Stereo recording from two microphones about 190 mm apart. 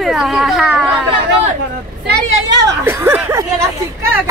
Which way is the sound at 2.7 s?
15° right (ahead or behind).